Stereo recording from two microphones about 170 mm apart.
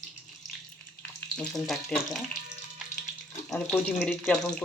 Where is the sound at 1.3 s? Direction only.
5° left (ahead or behind).